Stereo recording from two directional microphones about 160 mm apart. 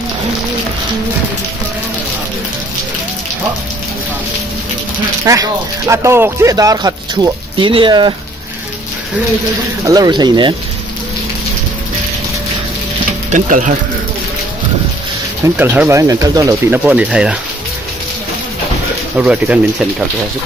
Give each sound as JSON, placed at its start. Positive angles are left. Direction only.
{"t": 5.2, "sound": "speech", "side_deg": -20}
{"t": 9.8, "sound": "speech", "side_deg": -25}
{"t": 13.3, "sound": "speech", "side_deg": -50}
{"t": 15.5, "sound": "speech", "side_deg": -10}
{"t": 19.1, "sound": "speech", "side_deg": -10}